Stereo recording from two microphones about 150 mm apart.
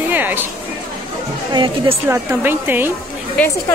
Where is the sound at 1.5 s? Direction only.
30° right (ahead or behind).